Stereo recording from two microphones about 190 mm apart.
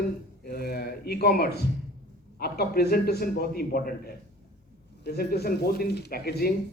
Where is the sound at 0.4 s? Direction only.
55° left (ahead or behind).